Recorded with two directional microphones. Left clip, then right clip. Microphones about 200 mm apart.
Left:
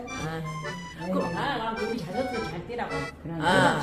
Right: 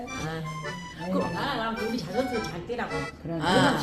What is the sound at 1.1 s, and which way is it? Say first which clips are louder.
A woman's voice: even; centre (ahead or behind).